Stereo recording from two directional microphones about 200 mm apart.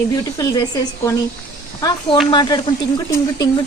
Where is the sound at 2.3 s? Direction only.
20° left (ahead or behind).